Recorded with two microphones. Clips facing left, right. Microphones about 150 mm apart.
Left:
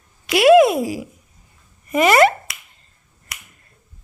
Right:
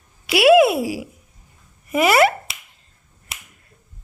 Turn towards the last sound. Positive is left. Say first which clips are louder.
# right 1 dB
turn(degrees=-25)  # may be behind; listen again after turning